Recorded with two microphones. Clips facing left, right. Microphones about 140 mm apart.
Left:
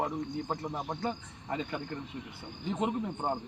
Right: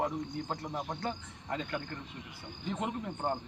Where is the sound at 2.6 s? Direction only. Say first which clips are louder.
Left 4 dB; 15° left (ahead or behind).